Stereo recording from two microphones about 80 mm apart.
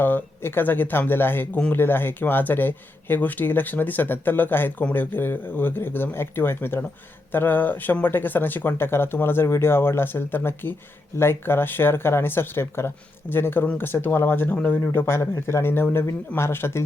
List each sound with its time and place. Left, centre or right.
0.0 s speech: left